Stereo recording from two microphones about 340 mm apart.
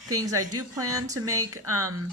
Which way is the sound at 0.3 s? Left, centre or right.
Right.